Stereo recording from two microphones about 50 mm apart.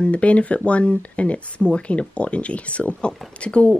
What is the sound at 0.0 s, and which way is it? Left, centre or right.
Speech, left.